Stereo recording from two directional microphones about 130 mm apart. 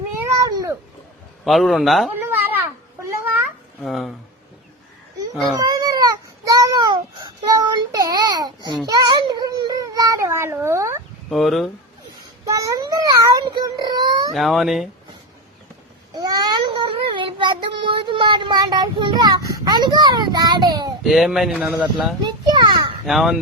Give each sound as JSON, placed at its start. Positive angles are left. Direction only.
{"t": 0.2, "sound": "cat", "side_deg": -25}
{"t": 1.5, "sound": "speech", "side_deg": 0}
{"t": 2.1, "sound": "a sound", "side_deg": -15}
{"t": 3.8, "sound": "speech", "side_deg": 0}
{"t": 5.5, "sound": "baby cry", "side_deg": -30}
{"t": 8.9, "sound": "a sound", "side_deg": -35}
{"t": 11.3, "sound": "speech", "side_deg": 0}
{"t": 12.5, "sound": "child singing", "side_deg": -25}
{"t": 14.3, "sound": "speech", "side_deg": 0}
{"t": 16.1, "sound": "child singing", "side_deg": -30}
{"t": 21.0, "sound": "speech", "side_deg": 0}
{"t": 22.2, "sound": "children playing", "side_deg": -35}
{"t": 23.0, "sound": "speech", "side_deg": 0}